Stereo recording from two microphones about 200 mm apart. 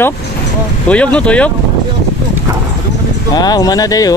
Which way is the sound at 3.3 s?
20° left (ahead or behind).